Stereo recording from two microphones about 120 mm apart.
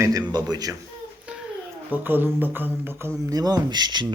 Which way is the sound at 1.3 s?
10° right (ahead or behind).